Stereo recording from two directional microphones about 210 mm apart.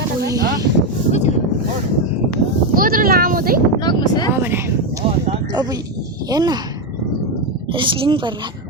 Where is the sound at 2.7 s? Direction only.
40° right (ahead or behind).